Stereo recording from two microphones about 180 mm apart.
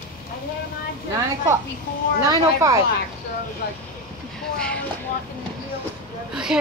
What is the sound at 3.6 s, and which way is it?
Speech, 60° left (ahead or behind).